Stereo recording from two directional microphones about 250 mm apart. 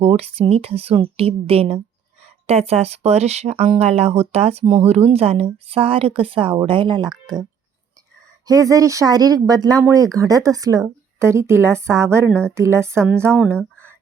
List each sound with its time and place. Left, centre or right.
0.0 s speech: right
8.4 s speech: centre